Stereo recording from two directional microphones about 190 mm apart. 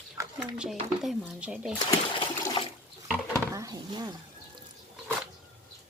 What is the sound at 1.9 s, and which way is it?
Water, 25° left (ahead or behind).